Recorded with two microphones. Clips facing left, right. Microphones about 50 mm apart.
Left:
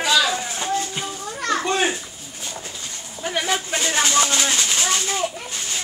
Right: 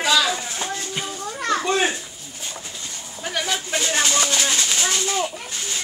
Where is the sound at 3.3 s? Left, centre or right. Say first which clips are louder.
Left 2 dB; left.